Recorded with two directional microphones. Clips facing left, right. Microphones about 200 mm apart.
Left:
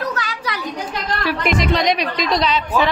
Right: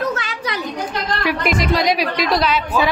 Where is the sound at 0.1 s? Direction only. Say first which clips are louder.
Right 1 dB; 25° right (ahead or behind).